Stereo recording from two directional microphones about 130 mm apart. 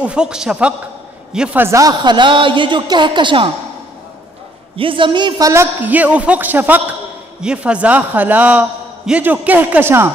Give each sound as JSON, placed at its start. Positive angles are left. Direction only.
{"t": 0.0, "sound": "a man's voice", "side_deg": -5}
{"t": 4.7, "sound": "a man's voice", "side_deg": -40}
{"t": 5.5, "sound": "a man's voice", "side_deg": -15}